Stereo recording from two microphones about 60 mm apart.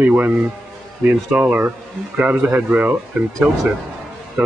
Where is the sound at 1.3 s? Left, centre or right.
Centre.